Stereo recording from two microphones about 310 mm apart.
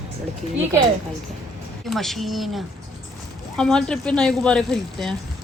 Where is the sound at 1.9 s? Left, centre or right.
Centre.